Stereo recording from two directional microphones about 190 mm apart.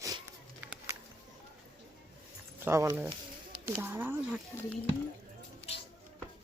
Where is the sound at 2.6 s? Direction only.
15° right (ahead or behind).